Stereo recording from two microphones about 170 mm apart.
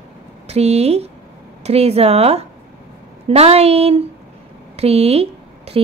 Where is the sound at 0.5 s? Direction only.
40° right (ahead or behind).